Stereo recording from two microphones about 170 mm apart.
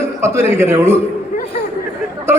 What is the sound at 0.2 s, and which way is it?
Speech, 15° right (ahead or behind).